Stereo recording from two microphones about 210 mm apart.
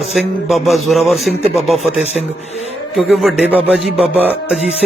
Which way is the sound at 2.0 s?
30° left (ahead or behind).